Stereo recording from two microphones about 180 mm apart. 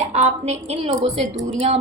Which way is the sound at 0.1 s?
40° right (ahead or behind).